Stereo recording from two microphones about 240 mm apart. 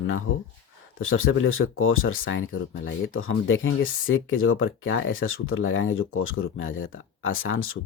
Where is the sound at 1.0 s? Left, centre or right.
Left.